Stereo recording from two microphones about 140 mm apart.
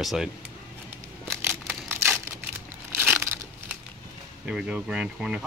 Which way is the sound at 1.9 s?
15° right (ahead or behind).